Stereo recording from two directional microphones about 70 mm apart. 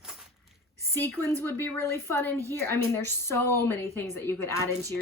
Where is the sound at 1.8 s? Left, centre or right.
Left.